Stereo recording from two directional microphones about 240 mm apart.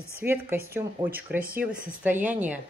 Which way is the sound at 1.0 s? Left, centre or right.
Centre.